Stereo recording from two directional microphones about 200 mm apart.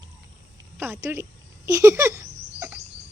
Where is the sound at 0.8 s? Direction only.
10° right (ahead or behind).